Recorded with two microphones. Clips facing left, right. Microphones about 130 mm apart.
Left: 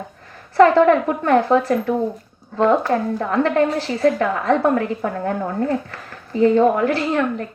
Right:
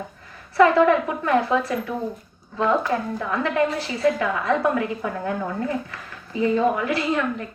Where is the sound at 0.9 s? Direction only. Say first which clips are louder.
Left 4 dB; 55° left (ahead or behind).